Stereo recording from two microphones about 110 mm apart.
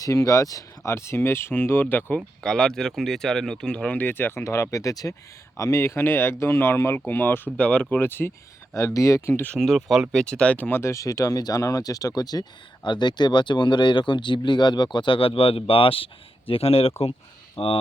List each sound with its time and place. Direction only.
0.0 s speech: 30° left (ahead or behind)
2.4 s speech: 5° left (ahead or behind)
9.6 s speech: centre (ahead or behind); by 17.7 s 60° left (ahead or behind)